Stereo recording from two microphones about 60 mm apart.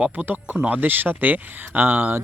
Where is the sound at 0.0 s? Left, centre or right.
Right.